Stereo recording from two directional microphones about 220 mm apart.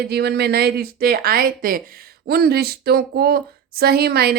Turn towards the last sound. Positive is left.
turn(degrees=-45)  # may be behind; listen again after turning